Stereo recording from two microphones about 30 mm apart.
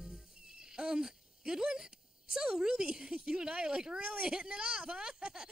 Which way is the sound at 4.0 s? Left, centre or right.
Right.